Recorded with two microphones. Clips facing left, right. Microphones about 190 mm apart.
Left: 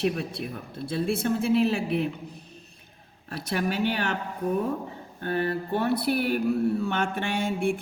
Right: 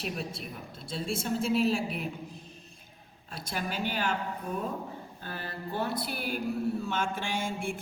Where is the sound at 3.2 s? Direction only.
65° left (ahead or behind).